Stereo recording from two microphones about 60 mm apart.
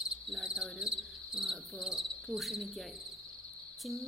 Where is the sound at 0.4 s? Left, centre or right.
Centre.